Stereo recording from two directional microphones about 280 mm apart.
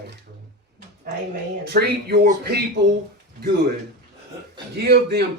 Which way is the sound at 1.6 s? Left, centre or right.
Right.